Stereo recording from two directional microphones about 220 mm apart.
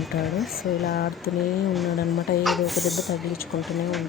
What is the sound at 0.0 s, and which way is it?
Speech, centre (ahead or behind).